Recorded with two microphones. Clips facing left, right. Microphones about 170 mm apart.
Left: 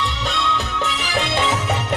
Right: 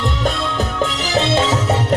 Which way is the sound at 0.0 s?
45° right (ahead or behind).